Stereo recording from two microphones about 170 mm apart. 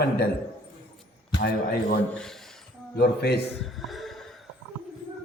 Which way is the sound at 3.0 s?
70° left (ahead or behind).